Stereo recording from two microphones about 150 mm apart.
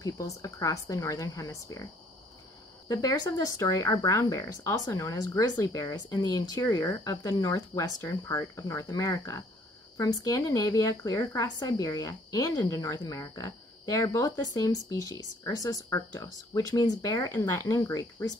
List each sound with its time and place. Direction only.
0.0 s speech: 20° left (ahead or behind)
2.9 s speech: 25° left (ahead or behind)